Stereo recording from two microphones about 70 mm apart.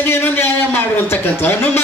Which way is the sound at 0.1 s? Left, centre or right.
Left.